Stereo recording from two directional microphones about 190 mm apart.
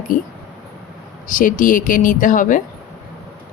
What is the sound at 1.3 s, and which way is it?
Speech, 45° left (ahead or behind).